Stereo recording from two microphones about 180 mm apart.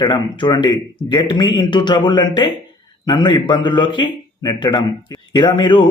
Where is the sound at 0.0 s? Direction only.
25° left (ahead or behind).